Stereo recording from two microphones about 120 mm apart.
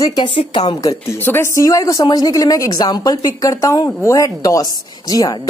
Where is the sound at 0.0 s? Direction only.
30° left (ahead or behind).